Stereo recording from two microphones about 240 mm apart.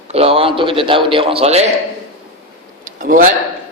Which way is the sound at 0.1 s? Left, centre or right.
Right.